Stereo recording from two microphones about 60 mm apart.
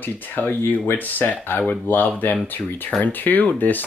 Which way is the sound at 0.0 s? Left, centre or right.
Left.